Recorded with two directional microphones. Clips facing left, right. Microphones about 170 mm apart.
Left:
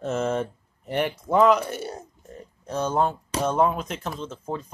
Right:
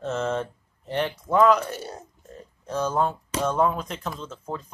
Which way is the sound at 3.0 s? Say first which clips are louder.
Left 1 dB; 10° left (ahead or behind).